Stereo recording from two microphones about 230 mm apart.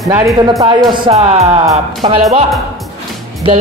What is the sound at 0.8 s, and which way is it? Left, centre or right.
Speech, right.